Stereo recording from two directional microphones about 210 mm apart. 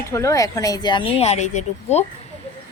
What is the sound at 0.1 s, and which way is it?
Speech, 15° left (ahead or behind).